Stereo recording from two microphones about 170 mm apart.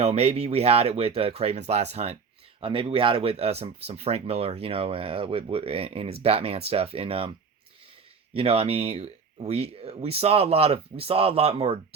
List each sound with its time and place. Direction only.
0.0 s speech: 40° right (ahead or behind)
8.3 s speech: 35° right (ahead or behind)